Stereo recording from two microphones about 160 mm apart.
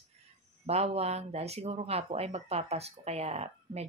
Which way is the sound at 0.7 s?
40° right (ahead or behind).